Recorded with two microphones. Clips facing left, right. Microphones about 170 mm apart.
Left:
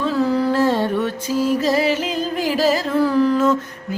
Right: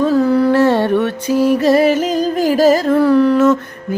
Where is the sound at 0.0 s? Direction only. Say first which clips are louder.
Right 6 dB; 50° right (ahead or behind).